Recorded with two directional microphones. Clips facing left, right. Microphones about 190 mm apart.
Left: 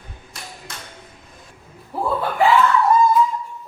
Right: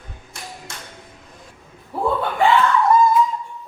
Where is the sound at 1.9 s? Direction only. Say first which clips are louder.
Even; centre (ahead or behind).